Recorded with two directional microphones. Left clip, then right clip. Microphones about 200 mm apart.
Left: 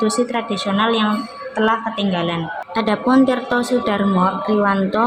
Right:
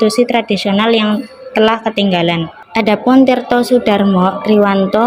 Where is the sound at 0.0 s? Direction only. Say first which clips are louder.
Right 7 dB; 25° right (ahead or behind).